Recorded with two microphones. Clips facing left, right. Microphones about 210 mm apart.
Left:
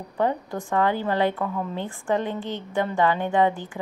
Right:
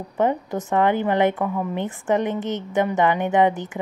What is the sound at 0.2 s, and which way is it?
A woman's voice, 20° right (ahead or behind).